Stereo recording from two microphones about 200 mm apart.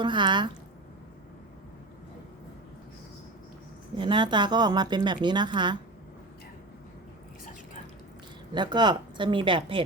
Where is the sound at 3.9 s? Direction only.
25° right (ahead or behind).